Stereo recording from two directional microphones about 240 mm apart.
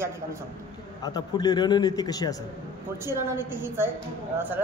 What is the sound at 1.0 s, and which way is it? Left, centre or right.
A man's voice, centre.